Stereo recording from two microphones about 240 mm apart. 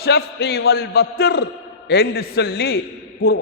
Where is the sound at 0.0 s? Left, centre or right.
Left.